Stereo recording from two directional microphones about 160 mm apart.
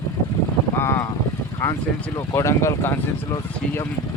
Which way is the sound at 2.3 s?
20° left (ahead or behind).